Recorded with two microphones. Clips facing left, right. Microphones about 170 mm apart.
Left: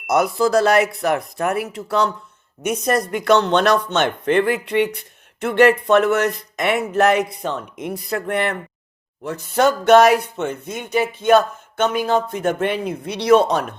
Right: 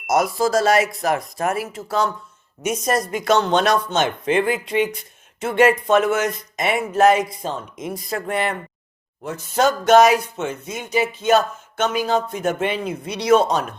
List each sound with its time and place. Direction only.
0.1 s speech: 60° left (ahead or behind)